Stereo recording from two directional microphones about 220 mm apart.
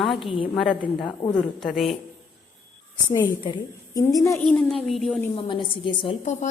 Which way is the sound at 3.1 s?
20° left (ahead or behind).